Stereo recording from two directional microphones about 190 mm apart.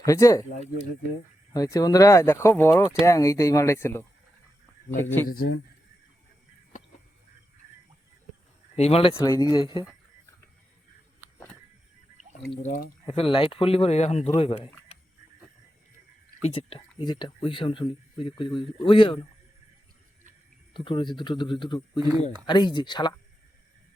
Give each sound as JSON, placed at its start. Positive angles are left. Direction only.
{"t": 0.0, "sound": "speech", "side_deg": 15}
{"t": 1.5, "sound": "speech", "side_deg": 20}
{"t": 5.3, "sound": "speech", "side_deg": 50}
{"t": 8.7, "sound": "speech", "side_deg": 30}
{"t": 9.1, "sound": "speech", "side_deg": 20}
{"t": 12.6, "sound": "speech", "side_deg": 45}
{"t": 13.1, "sound": "speech", "side_deg": 30}
{"t": 16.5, "sound": "speech", "side_deg": 30}
{"t": 20.7, "sound": "speech", "side_deg": 25}
{"t": 22.0, "sound": "speech", "side_deg": -20}
{"t": 22.4, "sound": "speech", "side_deg": 25}